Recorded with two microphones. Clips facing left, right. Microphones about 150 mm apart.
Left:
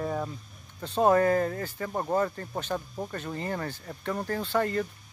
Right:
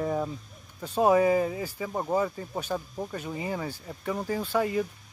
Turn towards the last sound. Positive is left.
turn(degrees=-10)  # may be behind; listen again after turning